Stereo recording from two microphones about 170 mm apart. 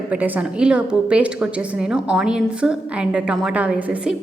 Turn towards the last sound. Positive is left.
turn(degrees=-5)  # may be behind; listen again after turning